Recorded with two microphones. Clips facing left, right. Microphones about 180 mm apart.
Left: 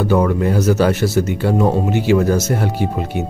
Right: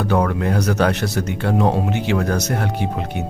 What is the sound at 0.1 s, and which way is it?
Speech, 5° left (ahead or behind).